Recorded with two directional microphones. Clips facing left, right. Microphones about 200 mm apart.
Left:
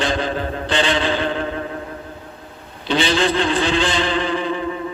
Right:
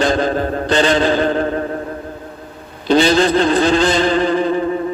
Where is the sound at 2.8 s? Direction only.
40° right (ahead or behind).